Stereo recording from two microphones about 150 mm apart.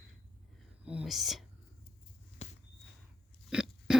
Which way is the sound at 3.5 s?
5° right (ahead or behind).